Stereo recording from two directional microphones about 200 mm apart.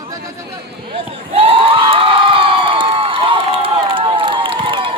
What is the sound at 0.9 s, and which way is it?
Crowd, 30° right (ahead or behind).